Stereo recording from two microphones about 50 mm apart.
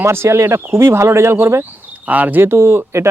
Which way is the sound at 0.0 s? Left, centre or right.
Right.